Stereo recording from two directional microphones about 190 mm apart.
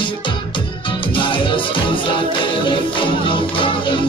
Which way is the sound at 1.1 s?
25° left (ahead or behind).